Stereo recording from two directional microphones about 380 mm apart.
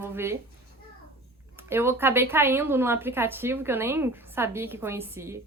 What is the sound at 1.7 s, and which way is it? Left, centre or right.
A woman's voice, centre.